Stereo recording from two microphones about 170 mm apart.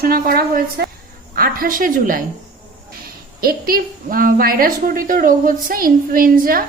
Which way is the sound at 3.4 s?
60° right (ahead or behind).